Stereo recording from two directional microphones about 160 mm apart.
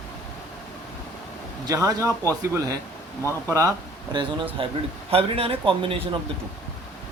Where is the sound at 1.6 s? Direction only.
20° right (ahead or behind).